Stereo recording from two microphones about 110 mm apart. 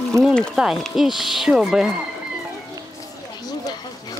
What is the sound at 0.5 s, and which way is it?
Speech, 5° right (ahead or behind).